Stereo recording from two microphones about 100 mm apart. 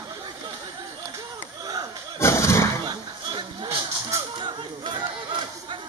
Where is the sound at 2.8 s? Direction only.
50° right (ahead or behind).